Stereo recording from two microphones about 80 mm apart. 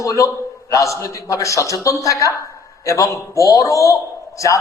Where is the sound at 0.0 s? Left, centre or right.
Left.